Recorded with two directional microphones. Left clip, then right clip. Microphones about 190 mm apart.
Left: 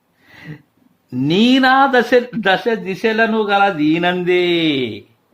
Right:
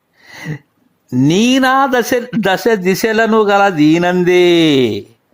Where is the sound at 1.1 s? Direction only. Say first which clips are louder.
Right 2 dB; 30° right (ahead or behind).